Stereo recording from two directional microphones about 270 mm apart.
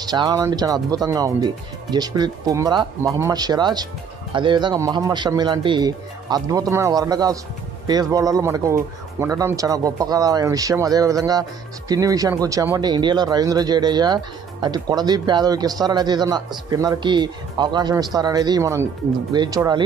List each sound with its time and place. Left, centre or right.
0.0 s speech: centre